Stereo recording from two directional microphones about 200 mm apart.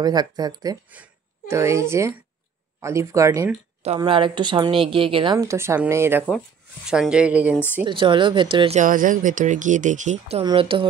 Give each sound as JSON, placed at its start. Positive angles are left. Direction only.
{"t": 0.0, "sound": "speech", "side_deg": -20}
{"t": 0.8, "sound": "speech", "side_deg": -5}
{"t": 3.8, "sound": "speech", "side_deg": -25}
{"t": 7.8, "sound": "speech", "side_deg": -25}
{"t": 10.4, "sound": "speech", "side_deg": -25}